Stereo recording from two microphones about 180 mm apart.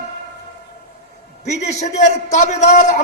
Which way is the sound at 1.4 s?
40° left (ahead or behind).